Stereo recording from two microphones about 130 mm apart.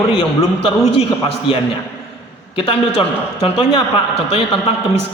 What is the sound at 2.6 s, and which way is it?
A man's voice, 50° left (ahead or behind).